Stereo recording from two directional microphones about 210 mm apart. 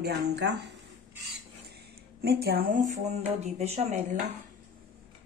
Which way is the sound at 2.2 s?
50° right (ahead or behind).